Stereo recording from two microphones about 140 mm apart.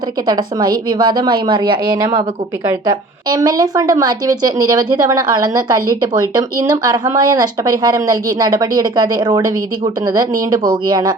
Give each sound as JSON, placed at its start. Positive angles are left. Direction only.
{"t": 0.3, "sound": "a woman's voice", "side_deg": -30}
{"t": 10.7, "sound": "a woman's voice", "side_deg": -30}